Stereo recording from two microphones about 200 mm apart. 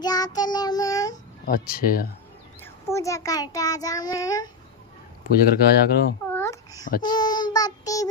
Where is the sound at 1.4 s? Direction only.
50° left (ahead or behind).